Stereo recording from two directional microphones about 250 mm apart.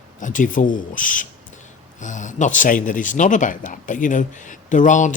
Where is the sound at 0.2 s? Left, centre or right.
Left.